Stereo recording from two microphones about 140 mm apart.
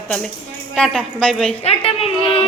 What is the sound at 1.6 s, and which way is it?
Speech, 45° left (ahead or behind).